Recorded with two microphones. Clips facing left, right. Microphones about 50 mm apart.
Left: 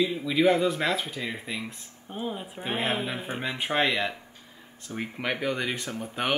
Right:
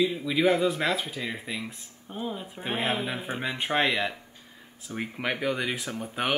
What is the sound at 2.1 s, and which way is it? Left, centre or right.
Speech, centre.